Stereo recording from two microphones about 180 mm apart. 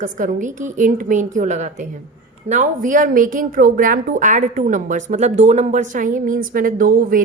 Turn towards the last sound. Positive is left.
turn(degrees=-50)  # may be behind; listen again after turning